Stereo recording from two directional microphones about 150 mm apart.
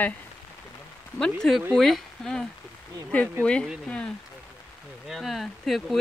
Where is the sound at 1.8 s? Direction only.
Centre (ahead or behind).